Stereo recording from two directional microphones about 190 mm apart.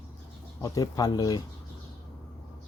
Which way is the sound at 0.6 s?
20° left (ahead or behind).